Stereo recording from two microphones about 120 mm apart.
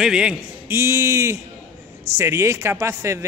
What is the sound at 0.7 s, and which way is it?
A man's voice, 20° right (ahead or behind).